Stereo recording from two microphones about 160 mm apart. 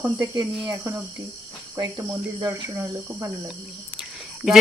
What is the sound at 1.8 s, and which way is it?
Speech, 25° right (ahead or behind).